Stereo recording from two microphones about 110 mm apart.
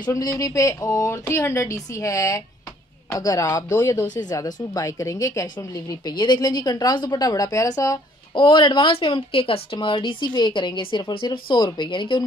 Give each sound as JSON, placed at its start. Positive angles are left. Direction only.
{"t": 0.0, "sound": "speech", "side_deg": 35}
{"t": 8.4, "sound": "speech", "side_deg": 45}